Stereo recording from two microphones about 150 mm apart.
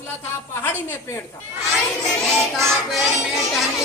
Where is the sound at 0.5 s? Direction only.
15° left (ahead or behind).